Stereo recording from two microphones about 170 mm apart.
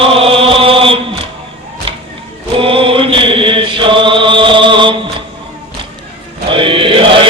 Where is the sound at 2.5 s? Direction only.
30° right (ahead or behind).